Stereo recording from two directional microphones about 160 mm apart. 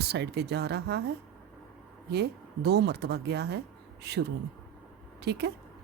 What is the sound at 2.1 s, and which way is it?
Speech, 90° right.